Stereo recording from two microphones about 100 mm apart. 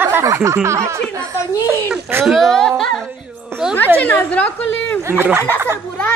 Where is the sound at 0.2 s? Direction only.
30° right (ahead or behind).